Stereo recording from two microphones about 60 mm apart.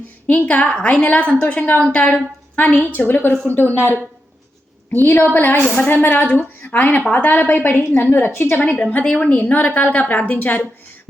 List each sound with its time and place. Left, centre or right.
0.3 s a woman's voice: left
4.9 s a woman's voice: left
5.9 s a woman's voice: left
6.3 s a woman's voice: left
8.6 s a woman's voice: centre